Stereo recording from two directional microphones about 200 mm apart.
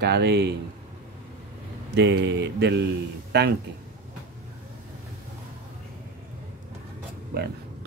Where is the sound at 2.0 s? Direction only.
60° right (ahead or behind).